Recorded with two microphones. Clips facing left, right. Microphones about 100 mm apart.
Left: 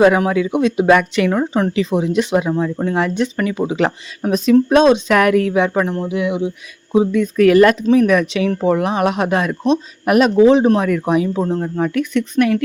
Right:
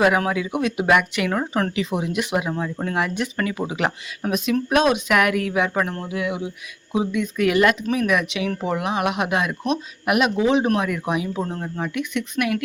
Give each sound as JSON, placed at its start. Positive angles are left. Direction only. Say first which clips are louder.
{"t": 0.0, "sound": "speech", "louder": "left 6 dB", "side_deg": 25}
{"t": 1.3, "sound": "speech", "louder": "left 6 dB", "side_deg": 20}
{"t": 1.7, "sound": "speech", "louder": "left 7 dB", "side_deg": 30}
{"t": 6.9, "sound": "speech", "louder": "left 8 dB", "side_deg": 35}